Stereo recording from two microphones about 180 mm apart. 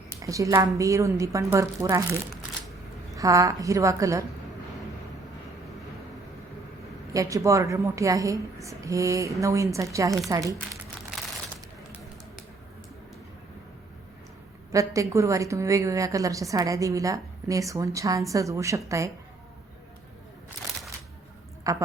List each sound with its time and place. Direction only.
0.2 s a woman's voice: 20° right (ahead or behind)
3.2 s a woman's voice: 20° right (ahead or behind)
7.1 s a woman's voice: 20° right (ahead or behind)
14.7 s a woman's voice: 20° right (ahead or behind)
21.6 s a woman's voice: 15° right (ahead or behind)